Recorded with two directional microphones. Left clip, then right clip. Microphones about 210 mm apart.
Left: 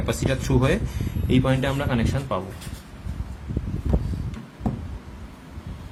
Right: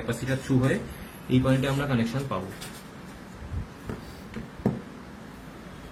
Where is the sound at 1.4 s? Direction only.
25° left (ahead or behind).